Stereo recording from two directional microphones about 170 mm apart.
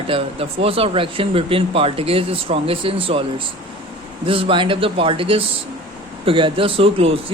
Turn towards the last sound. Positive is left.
turn(degrees=-35)  # may be behind; listen again after turning